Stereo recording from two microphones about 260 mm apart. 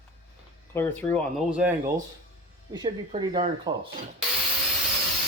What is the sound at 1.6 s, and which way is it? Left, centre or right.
Speech, centre.